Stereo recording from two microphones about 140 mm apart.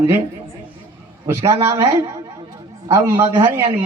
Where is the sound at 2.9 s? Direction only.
20° right (ahead or behind).